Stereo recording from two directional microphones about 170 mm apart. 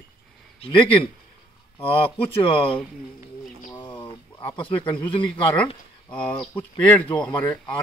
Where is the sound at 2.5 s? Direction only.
30° left (ahead or behind).